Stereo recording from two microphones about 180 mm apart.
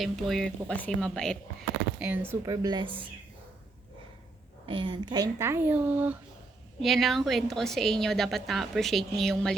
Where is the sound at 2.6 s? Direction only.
25° right (ahead or behind).